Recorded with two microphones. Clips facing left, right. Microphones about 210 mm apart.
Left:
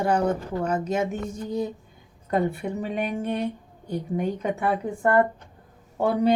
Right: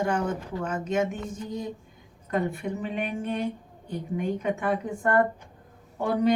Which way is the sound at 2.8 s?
40° left (ahead or behind).